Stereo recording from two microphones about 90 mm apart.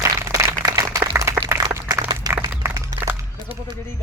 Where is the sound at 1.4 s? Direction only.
30° right (ahead or behind).